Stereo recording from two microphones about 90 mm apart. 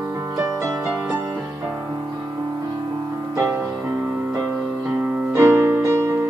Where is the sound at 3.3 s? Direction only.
35° right (ahead or behind).